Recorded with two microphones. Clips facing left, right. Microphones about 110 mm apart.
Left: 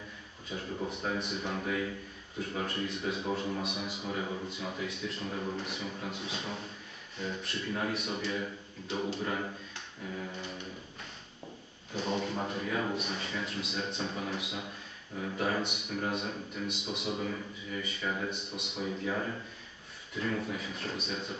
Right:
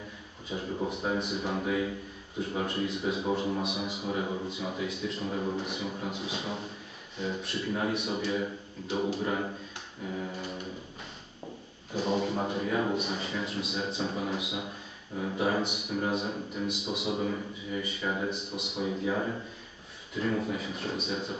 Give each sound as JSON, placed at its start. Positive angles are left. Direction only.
{"t": 1.2, "sound": "a man's voice", "side_deg": -5}
{"t": 11.9, "sound": "a man's voice", "side_deg": -5}
{"t": 17.2, "sound": "speech", "side_deg": -15}
{"t": 18.3, "sound": "a man's voice", "side_deg": 0}